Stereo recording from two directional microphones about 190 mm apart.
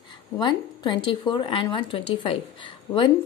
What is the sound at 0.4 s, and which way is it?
Speech, 25° left (ahead or behind).